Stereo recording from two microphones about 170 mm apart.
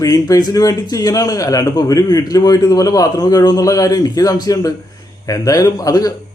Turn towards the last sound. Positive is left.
turn(degrees=20)  # may be behind; listen again after turning